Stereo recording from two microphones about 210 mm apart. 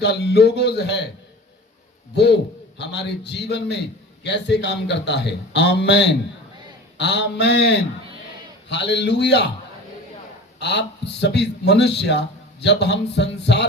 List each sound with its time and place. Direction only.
0.0 s a man's voice: 50° left (ahead or behind)
2.1 s a man's voice: 55° left (ahead or behind)
10.6 s a man's voice: 55° left (ahead or behind)